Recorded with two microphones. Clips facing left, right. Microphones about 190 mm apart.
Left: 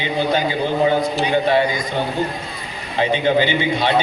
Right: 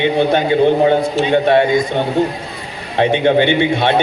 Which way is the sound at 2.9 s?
60° right (ahead or behind).